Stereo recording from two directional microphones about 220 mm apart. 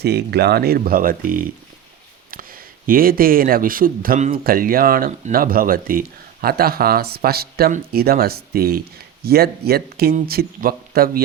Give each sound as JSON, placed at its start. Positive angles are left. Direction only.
{"t": 0.0, "sound": "speech", "side_deg": -45}